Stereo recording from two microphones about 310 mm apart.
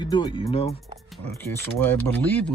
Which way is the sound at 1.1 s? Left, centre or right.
Centre.